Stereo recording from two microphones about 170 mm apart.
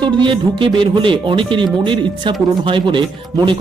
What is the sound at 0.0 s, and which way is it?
Speech, 30° right (ahead or behind).